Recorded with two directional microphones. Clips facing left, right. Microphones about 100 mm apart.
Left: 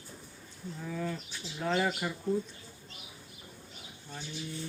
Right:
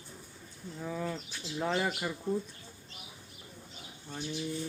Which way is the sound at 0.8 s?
15° right (ahead or behind).